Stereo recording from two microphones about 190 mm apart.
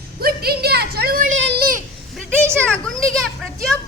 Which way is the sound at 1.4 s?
65° right (ahead or behind).